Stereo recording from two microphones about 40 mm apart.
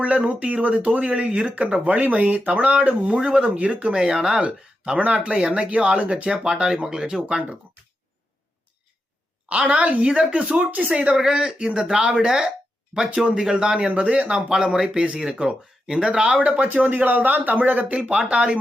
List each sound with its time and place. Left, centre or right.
0.0 s speech: right
3.2 s speech: right
3.9 s speech: right
4.4 s speech: right; by 7.2 s centre
7.2 s speech: right
9.6 s speech: right
10.0 s speech: right
10.9 s speech: right
14.5 s speech: centre
16.6 s speech: right